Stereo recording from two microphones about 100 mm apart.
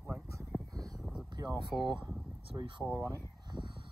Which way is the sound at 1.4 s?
35° right (ahead or behind).